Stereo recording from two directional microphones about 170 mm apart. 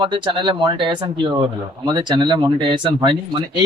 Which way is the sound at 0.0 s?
30° right (ahead or behind).